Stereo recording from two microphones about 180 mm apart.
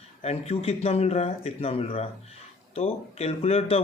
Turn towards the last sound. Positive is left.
turn(degrees=35)  # may be behind; listen again after turning